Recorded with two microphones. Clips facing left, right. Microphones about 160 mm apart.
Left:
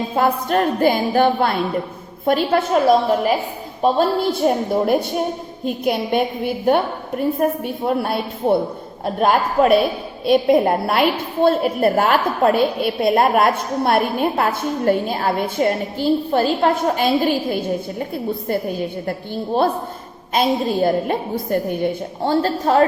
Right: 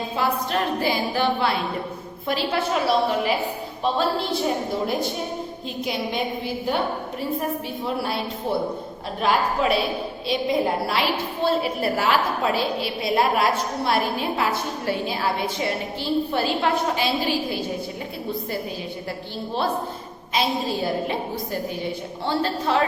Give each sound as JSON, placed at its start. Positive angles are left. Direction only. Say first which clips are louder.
{"t": 0.2, "sound": "a woman's voice", "louder": "left 6 dB", "side_deg": 50}
{"t": 20.3, "sound": "a woman's voice", "louder": "left 6 dB", "side_deg": 50}
{"t": 22.2, "sound": "a woman's voice", "louder": "left 6 dB", "side_deg": 45}